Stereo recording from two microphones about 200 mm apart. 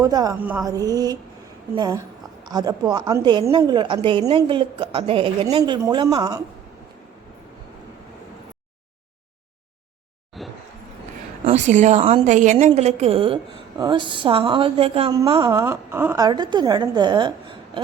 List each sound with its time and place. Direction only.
0.0 s a woman's voice: 20° right (ahead or behind)
0.3 s a sound: 10° right (ahead or behind)
1.7 s a woman's voice: 20° right (ahead or behind)
10.3 s a sound: centre (ahead or behind)
11.4 s a woman's voice: 35° right (ahead or behind)
15.5 s a woman's voice: 15° right (ahead or behind)